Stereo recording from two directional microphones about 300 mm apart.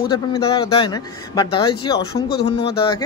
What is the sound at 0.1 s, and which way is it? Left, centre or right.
Speech, centre.